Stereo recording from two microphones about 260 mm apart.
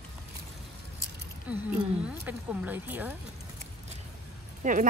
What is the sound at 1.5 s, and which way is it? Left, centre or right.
Speech, centre.